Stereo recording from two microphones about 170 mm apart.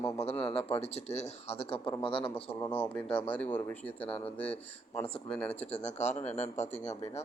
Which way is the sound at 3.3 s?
10° left (ahead or behind).